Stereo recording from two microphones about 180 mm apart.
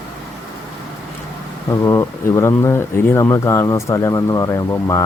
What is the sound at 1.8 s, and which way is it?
Speech, 15° left (ahead or behind).